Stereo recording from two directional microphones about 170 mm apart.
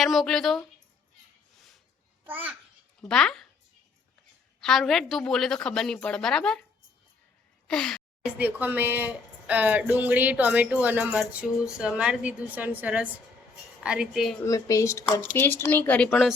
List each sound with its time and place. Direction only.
0.0 s a woman's voice: centre (ahead or behind)
2.2 s speech: 10° right (ahead or behind)
3.0 s a woman's voice: 5° left (ahead or behind)
4.6 s a woman's voice: centre (ahead or behind)
7.7 s gasp: 5° left (ahead or behind)
8.4 s a woman's voice: 10° right (ahead or behind)
14.4 s speech: 20° left (ahead or behind)